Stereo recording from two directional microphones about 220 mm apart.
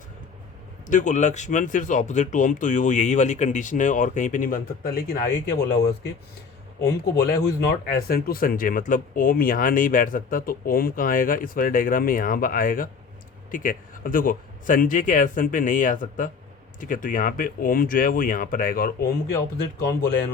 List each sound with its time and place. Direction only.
0.9 s speech: 35° left (ahead or behind)